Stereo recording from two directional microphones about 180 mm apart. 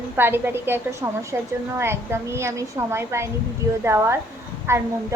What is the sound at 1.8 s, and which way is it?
Speech, 15° right (ahead or behind).